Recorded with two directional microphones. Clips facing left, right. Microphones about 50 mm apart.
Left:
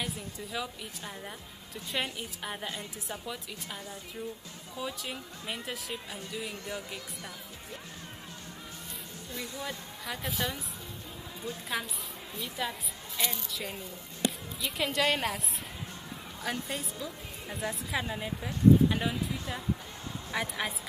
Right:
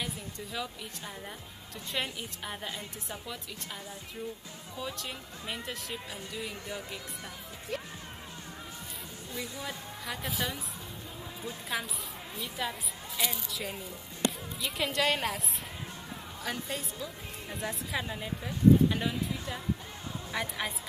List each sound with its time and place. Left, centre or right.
0.0 s a woman's voice: centre
9.3 s a woman's voice: centre
11.7 s a woman's voice: centre
16.4 s a woman's voice: centre